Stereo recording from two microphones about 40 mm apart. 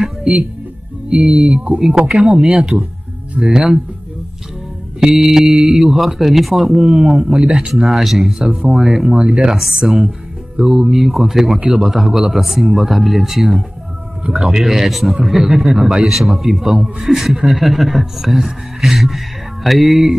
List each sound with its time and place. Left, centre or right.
0.2 s speech: centre
1.4 s speech: right
2.0 s speech: centre
5.2 s a man's voice: centre
9.2 s speech: right
9.8 s a man's voice: centre